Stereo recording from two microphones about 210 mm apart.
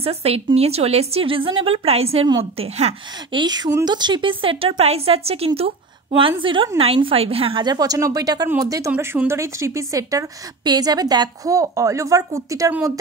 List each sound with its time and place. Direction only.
0.0 s a woman's voice: 30° right (ahead or behind)